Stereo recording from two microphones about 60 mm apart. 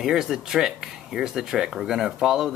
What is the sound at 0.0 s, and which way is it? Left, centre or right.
Speech, centre.